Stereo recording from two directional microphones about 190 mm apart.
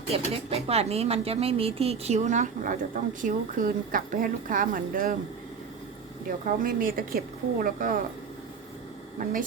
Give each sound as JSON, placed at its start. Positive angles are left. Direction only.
{"t": 0.1, "sound": "speech", "side_deg": -35}
{"t": 6.2, "sound": "a woman's voice", "side_deg": -45}